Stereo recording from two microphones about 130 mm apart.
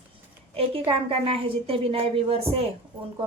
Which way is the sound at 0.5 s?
45° right (ahead or behind).